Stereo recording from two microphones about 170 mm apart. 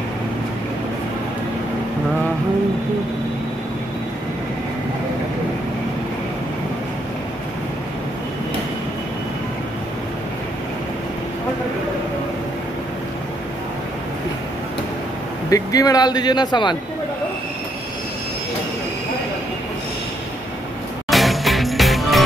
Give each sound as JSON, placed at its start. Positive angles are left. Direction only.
{"t": 15.5, "sound": "speech", "side_deg": 20}
{"t": 21.1, "sound": "music", "side_deg": 0}